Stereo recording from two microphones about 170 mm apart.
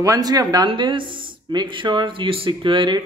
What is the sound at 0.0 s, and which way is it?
Speech, 20° right (ahead or behind).